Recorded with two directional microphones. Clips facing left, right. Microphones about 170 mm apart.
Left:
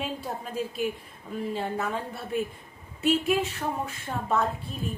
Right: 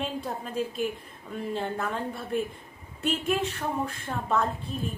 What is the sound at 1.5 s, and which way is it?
Speech, 5° left (ahead or behind).